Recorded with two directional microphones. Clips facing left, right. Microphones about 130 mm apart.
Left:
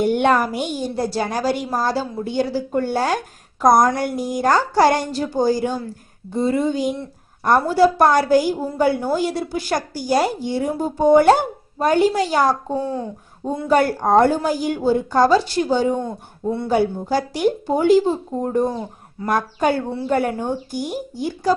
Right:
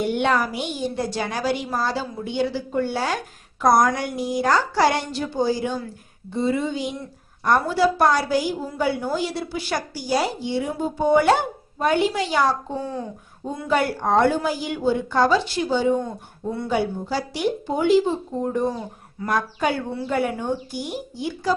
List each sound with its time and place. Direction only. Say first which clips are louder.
0.0 s a woman's voice: left 4 dB; 45° left (ahead or behind)
13.7 s a woman's voice: left 4 dB; 45° left (ahead or behind)